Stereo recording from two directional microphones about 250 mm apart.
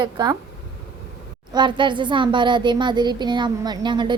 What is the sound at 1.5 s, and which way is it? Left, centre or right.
A woman's voice, centre.